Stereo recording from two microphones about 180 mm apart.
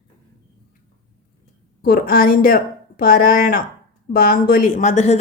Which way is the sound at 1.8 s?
55° left (ahead or behind).